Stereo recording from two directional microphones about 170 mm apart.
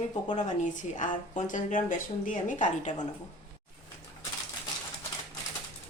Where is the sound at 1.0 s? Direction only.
50° left (ahead or behind).